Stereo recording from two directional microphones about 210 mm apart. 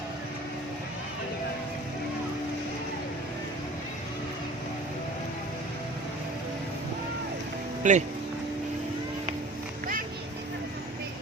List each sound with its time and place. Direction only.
7.8 s speech: 35° right (ahead or behind)